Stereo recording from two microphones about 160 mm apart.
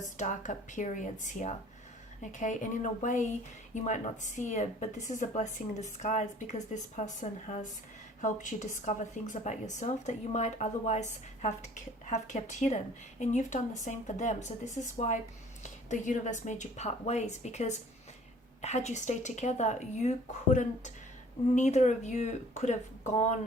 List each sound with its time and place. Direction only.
0.0 s a woman's voice: 50° left (ahead or behind)